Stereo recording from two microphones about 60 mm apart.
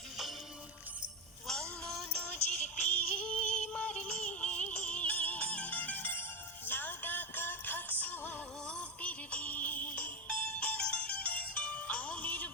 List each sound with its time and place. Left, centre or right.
1.5 s music: centre; by 8.4 s left
8.6 s music: centre